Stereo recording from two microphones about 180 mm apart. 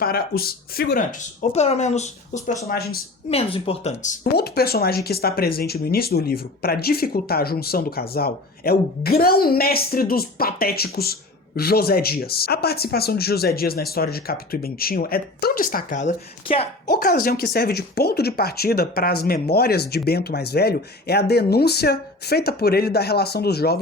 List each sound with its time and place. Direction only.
0.0 s speech: 55° left (ahead or behind); by 2.6 s 40° left (ahead or behind)
2.6 s speech: 60° left (ahead or behind)
3.2 s speech: 35° left (ahead or behind)
4.4 s speech: 60° left (ahead or behind); by 16.6 s 35° left (ahead or behind)
16.8 s speech: 60° left (ahead or behind)